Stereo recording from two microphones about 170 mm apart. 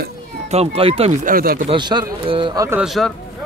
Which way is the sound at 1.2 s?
60° right (ahead or behind).